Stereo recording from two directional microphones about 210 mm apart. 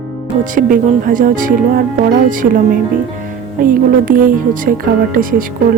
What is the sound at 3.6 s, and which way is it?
A woman's voice, 40° right (ahead or behind).